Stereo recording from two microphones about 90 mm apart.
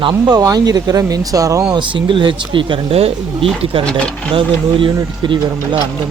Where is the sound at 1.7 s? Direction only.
65° right (ahead or behind); by 3.8 s 90° right.